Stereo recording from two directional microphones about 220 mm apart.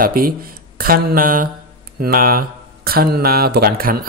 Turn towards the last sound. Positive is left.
turn(degrees=-40)  # may be behind; listen again after turning